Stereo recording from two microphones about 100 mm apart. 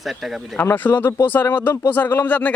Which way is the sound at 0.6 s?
20° left (ahead or behind).